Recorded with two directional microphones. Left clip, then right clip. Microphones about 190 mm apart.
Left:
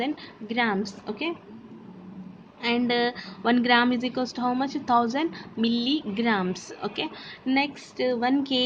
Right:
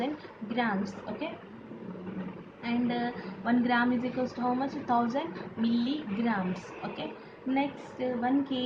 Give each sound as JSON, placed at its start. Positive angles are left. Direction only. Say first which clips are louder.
{"t": 0.0, "sound": "a woman's voice", "louder": "left 4 dB", "side_deg": 50}
{"t": 2.6, "sound": "a woman's voice", "louder": "left 8 dB", "side_deg": 50}